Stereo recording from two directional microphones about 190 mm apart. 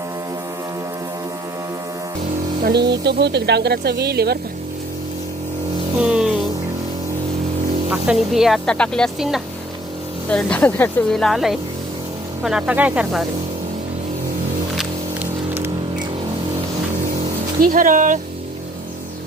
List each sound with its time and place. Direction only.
2.6 s speech: 60° right (ahead or behind)
6.0 s music: 5° right (ahead or behind)
7.9 s speech: centre (ahead or behind)
14.8 s a sound: 10° right (ahead or behind)
17.6 s speech: 45° right (ahead or behind)